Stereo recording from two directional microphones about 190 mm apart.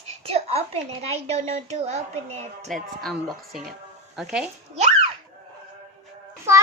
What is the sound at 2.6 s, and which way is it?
A child's voice, centre (ahead or behind).